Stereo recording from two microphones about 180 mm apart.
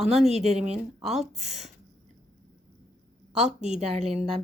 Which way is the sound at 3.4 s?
40° right (ahead or behind).